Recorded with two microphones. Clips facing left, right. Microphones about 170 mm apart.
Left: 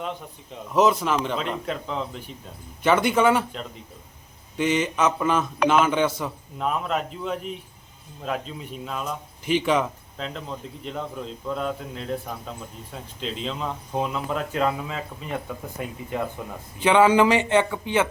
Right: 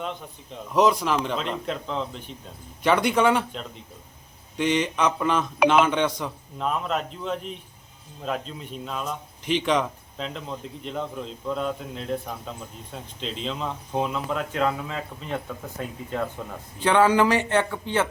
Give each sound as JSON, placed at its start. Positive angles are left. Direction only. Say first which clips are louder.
{"t": 0.7, "sound": "a man's voice", "louder": "even", "side_deg": 0}